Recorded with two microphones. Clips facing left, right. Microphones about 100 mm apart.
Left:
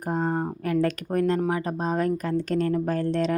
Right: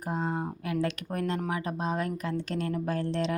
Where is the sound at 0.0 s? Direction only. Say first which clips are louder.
Left 5 dB; 45° left (ahead or behind).